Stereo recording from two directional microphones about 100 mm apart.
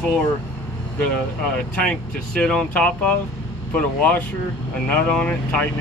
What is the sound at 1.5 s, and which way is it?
Speech, 10° left (ahead or behind).